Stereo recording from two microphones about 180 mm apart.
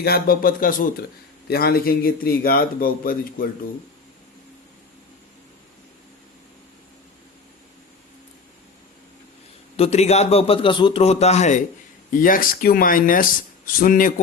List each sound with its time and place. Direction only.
0.0 s a man's voice: 55° left (ahead or behind)
9.7 s a man's voice: 35° left (ahead or behind)
12.2 s speech: 50° left (ahead or behind)